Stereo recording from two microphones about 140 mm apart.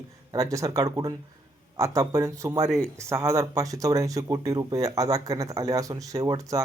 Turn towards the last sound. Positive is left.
turn(degrees=-25)  # may be behind; listen again after turning